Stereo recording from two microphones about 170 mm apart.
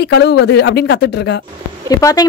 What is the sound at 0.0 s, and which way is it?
Speech, 80° left.